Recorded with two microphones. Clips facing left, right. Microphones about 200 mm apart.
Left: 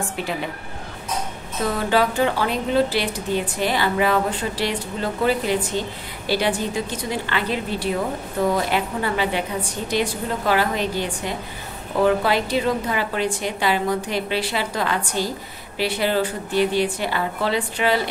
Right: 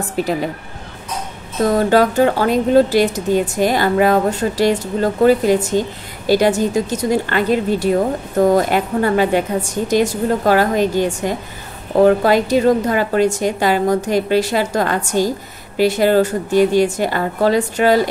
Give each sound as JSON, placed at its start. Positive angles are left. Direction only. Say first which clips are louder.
{"t": 0.1, "sound": "speech", "louder": "right 8 dB", "side_deg": -40}
{"t": 1.6, "sound": "speech", "louder": "right 7 dB", "side_deg": -45}